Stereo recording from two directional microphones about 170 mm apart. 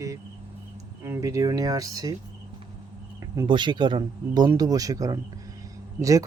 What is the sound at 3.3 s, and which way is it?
Speech, 25° right (ahead or behind).